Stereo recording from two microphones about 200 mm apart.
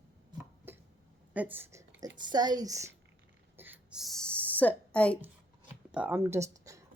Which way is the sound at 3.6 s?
10° right (ahead or behind).